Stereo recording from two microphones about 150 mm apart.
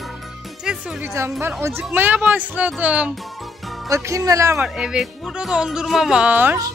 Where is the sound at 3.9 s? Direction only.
20° right (ahead or behind).